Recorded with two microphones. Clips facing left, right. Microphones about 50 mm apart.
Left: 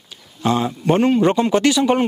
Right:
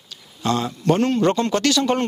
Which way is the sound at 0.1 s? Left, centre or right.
Centre.